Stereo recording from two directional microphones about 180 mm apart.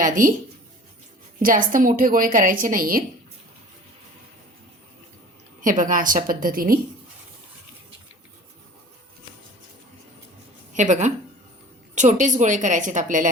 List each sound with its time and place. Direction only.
0.0 s a woman's voice: 45° right (ahead or behind)
1.4 s a woman's voice: 50° right (ahead or behind)
5.6 s a woman's voice: 45° right (ahead or behind)
10.8 s a woman's voice: 40° right (ahead or behind)